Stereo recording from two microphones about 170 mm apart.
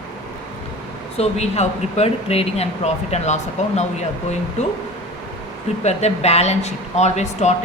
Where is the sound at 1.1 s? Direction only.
40° left (ahead or behind).